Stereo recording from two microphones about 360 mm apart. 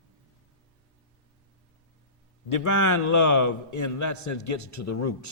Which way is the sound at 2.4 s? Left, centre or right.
Left.